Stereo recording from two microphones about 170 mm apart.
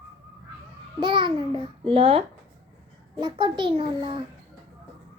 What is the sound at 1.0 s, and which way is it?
A child's voice, 30° right (ahead or behind).